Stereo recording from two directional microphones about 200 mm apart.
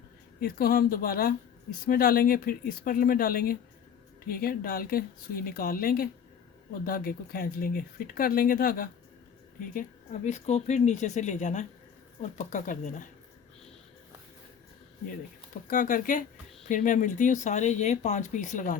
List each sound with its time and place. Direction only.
0.3 s speech: 50° left (ahead or behind)
15.6 s speech: 40° left (ahead or behind)